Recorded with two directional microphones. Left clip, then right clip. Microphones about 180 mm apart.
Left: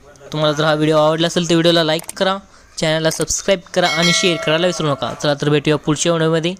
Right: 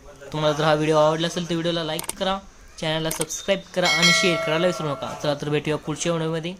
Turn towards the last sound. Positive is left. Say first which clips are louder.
# left 9 dB
turn(degrees=35)  # may be behind; listen again after turning